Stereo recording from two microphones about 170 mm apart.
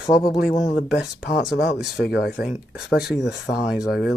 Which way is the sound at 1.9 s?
65° left (ahead or behind).